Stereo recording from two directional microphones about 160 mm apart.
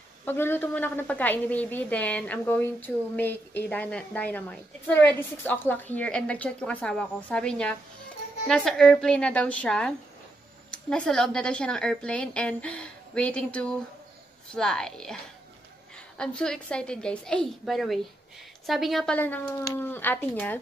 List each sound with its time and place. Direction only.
0.2 s a woman's voice: 15° left (ahead or behind)
16.2 s a woman's voice: 5° left (ahead or behind)